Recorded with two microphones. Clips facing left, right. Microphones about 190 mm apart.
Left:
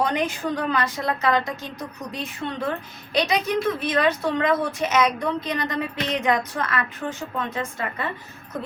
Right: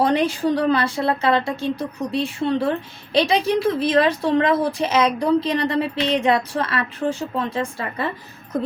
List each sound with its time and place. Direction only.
0.0 s speech: 30° right (ahead or behind)